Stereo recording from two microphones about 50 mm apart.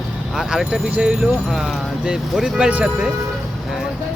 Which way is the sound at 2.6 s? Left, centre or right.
Centre.